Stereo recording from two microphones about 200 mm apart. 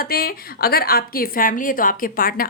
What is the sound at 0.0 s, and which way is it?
A woman's voice, 50° left (ahead or behind).